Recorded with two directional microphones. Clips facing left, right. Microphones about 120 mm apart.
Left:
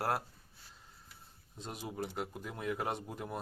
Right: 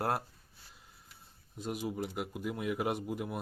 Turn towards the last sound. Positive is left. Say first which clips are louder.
# right 4 dB
turn(degrees=-5)  # may be behind; listen again after turning